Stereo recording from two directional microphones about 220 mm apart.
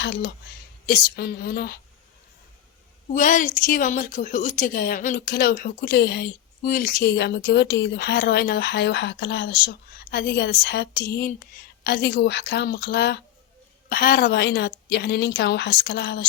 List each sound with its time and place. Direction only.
0.0 s a woman's voice: 50° left (ahead or behind)
3.1 s a woman's voice: 35° left (ahead or behind)